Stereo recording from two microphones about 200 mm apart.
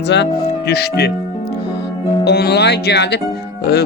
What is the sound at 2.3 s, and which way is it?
Music, 55° left (ahead or behind).